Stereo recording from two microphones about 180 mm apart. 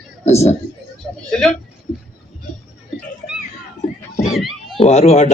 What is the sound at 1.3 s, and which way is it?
Speech, 5° left (ahead or behind).